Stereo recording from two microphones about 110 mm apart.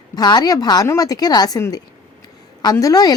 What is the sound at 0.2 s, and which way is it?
A woman's voice, 40° left (ahead or behind).